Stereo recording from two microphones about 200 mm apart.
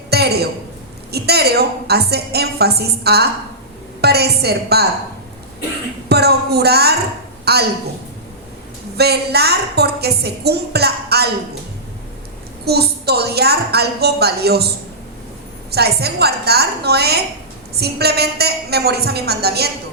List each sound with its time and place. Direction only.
0.1 s a sound: 55° right (ahead or behind)
1.1 s a woman's voice: 55° right (ahead or behind)
6.1 s a woman's voice: 55° right (ahead or behind)
9.0 s a woman's voice: 55° right (ahead or behind)
12.6 s a woman's voice: 55° right (ahead or behind)
15.7 s a woman's voice: 55° right (ahead or behind)